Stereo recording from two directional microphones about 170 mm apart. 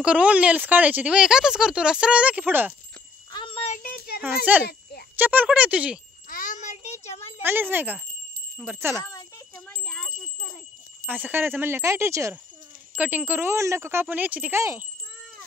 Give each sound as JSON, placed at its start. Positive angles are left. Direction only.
{"t": 0.0, "sound": "speech", "side_deg": -5}
{"t": 3.3, "sound": "a sound", "side_deg": 30}
{"t": 3.7, "sound": "child singing", "side_deg": 55}
{"t": 4.5, "sound": "speech", "side_deg": -10}
{"t": 6.2, "sound": "a sound", "side_deg": 50}
{"t": 7.4, "sound": "speech", "side_deg": -10}
{"t": 9.9, "sound": "wind chime", "side_deg": -5}
{"t": 11.1, "sound": "speech", "side_deg": -10}